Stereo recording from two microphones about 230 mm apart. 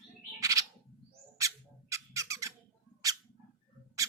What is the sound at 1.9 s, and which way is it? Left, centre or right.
Squawk, centre.